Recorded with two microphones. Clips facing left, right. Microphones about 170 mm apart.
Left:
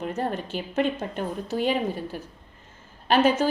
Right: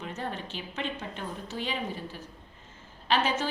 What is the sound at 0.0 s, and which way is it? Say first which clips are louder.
A woman's voice: left 7 dB; 45° left (ahead or behind).